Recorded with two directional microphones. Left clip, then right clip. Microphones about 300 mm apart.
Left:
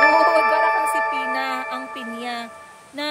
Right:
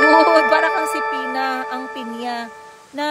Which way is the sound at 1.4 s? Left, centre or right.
Centre.